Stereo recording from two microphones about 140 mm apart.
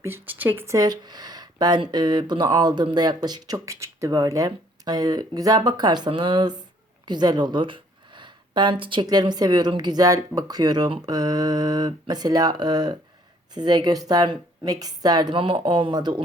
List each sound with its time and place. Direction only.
0.0 s speech: 15° right (ahead or behind); by 16.2 s 30° right (ahead or behind)